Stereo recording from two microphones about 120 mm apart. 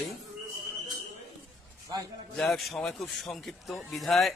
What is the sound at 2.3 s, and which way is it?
A man's voice, centre (ahead or behind).